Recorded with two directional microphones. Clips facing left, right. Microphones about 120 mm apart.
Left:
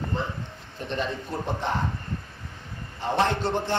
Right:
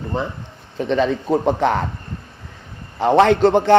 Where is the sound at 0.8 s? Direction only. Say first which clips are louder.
Right 11 dB; 90° right.